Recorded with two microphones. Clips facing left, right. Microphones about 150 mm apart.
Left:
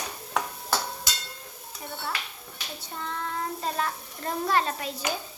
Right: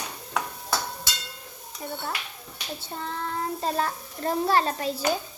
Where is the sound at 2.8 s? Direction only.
35° right (ahead or behind).